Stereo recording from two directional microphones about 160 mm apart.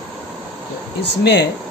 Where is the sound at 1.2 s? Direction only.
90° left.